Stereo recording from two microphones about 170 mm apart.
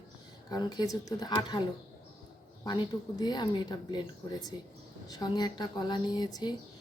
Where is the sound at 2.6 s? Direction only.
25° left (ahead or behind).